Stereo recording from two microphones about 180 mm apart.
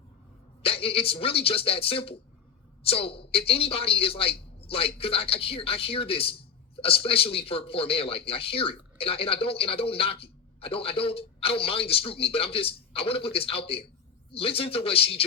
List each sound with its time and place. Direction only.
0.6 s a man's voice: 30° left (ahead or behind)